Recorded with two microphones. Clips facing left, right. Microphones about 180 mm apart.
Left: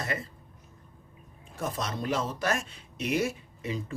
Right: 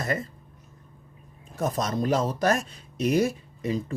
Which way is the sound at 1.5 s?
40° right (ahead or behind).